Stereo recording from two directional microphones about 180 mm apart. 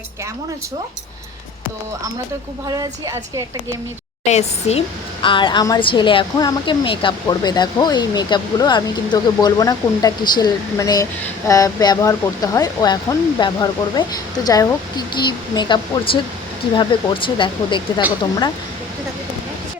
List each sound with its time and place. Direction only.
2.6 s a woman's voice: 20° right (ahead or behind)
4.3 s a woman's voice: 35° left (ahead or behind)
16.9 s a woman's voice: 30° left (ahead or behind)